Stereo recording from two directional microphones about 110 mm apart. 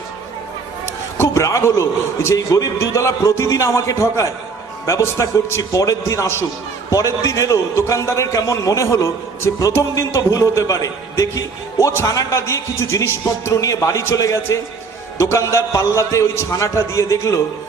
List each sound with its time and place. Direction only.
0.9 s a man's voice: 25° left (ahead or behind)